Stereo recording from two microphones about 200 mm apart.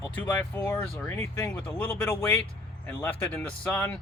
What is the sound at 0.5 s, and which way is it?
Speech, 10° left (ahead or behind).